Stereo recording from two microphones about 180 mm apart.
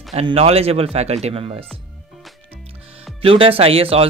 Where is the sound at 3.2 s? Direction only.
30° right (ahead or behind).